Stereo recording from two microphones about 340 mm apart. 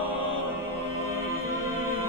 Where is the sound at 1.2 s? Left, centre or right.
Right.